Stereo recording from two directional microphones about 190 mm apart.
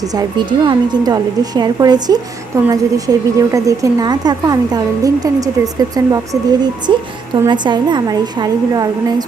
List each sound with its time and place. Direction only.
0.0 s a woman's voice: 20° right (ahead or behind)